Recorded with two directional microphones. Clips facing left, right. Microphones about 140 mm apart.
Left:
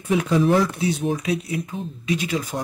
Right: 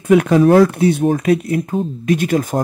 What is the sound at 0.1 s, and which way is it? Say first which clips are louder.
Speech: right 8 dB; 65° right (ahead or behind).